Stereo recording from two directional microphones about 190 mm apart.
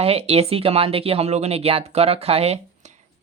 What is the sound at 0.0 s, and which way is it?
Speech, 30° right (ahead or behind).